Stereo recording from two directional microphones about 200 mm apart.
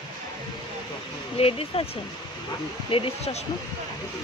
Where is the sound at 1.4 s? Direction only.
30° left (ahead or behind).